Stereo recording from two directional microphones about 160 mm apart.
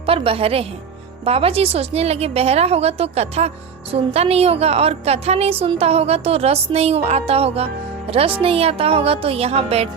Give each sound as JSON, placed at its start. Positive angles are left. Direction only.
{"t": 0.0, "sound": "a woman's voice", "side_deg": -35}